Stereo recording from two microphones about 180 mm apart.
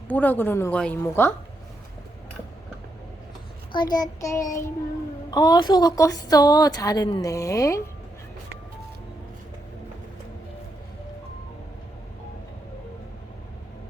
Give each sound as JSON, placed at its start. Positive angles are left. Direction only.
{"t": 0.1, "sound": "speech", "side_deg": 10}
{"t": 3.7, "sound": "a woman's voice", "side_deg": 25}